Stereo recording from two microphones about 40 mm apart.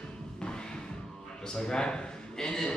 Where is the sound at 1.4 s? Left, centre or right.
Centre.